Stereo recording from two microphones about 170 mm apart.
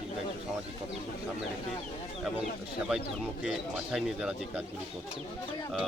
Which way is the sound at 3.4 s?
5° right (ahead or behind).